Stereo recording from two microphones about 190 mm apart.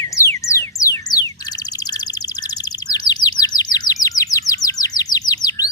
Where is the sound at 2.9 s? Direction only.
20° left (ahead or behind).